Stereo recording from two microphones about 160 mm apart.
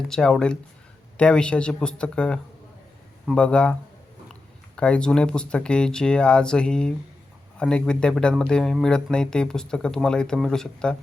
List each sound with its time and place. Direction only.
0.1 s speech: 5° left (ahead or behind)
4.8 s speech: 5° left (ahead or behind)